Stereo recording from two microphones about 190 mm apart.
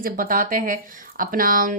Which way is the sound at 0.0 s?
45° right (ahead or behind).